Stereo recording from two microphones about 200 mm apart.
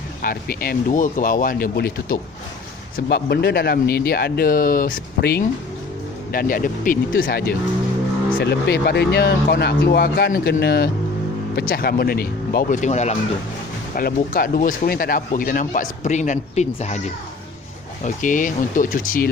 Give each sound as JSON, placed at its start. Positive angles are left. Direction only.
{"t": 0.2, "sound": "speech", "side_deg": 45}
{"t": 13.9, "sound": "speech", "side_deg": 45}
{"t": 18.0, "sound": "speech", "side_deg": 40}